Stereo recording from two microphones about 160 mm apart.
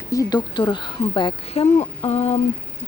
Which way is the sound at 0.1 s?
25° left (ahead or behind).